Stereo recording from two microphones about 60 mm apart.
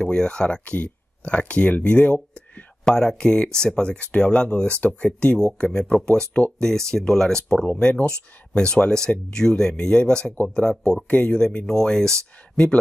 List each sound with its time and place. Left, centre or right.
0.0 s speech: centre
2.8 s speech: centre
11.6 s speech: centre